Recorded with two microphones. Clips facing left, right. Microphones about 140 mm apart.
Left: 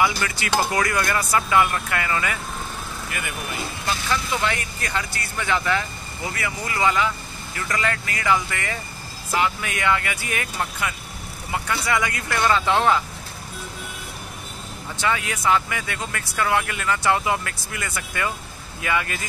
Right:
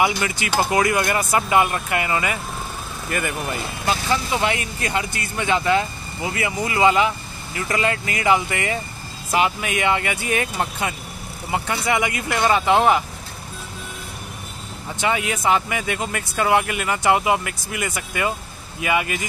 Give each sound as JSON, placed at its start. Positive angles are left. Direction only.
{"t": 0.0, "sound": "speech", "side_deg": -20}
{"t": 3.1, "sound": "speech", "side_deg": -45}
{"t": 3.8, "sound": "speech", "side_deg": -25}
{"t": 15.0, "sound": "speech", "side_deg": -20}